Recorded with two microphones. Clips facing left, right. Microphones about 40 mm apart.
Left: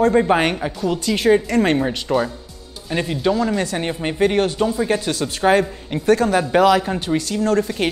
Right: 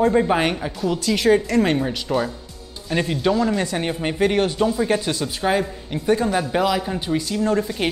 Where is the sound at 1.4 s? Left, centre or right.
Left.